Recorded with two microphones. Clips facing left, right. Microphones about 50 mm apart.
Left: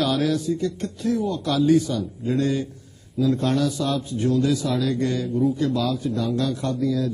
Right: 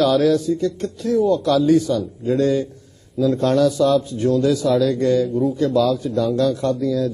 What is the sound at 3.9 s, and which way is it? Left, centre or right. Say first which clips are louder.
A man's voice: right 5 dB; left.